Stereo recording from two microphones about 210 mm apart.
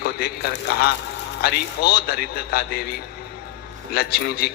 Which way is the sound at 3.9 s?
50° left (ahead or behind).